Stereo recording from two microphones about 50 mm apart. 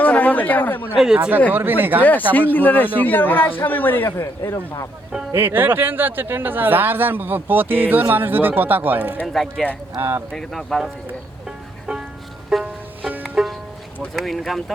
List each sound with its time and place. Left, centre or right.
0.0 s chatter: left
0.9 s speech: centre
1.5 s speech: right
2.5 s a man's voice: left
5.4 s speech: right
9.2 s speech: centre
10.0 s speech: right
10.3 s speech: centre
12.5 s music: centre
13.0 s music: right
14.2 s speech: centre